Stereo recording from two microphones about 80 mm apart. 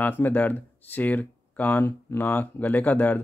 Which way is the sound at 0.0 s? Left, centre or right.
Left.